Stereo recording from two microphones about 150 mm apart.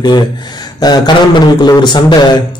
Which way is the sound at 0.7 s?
25° left (ahead or behind).